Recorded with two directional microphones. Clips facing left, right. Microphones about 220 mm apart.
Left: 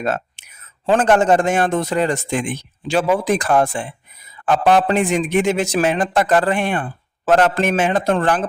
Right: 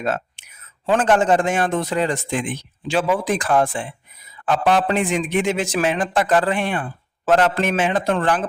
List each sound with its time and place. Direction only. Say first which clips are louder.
0.0 s a man's voice: left 2 dB; 45° left (ahead or behind)